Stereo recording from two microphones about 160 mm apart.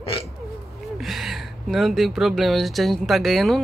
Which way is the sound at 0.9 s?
Centre (ahead or behind).